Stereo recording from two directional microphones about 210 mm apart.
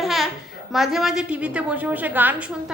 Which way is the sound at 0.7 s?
Centre (ahead or behind).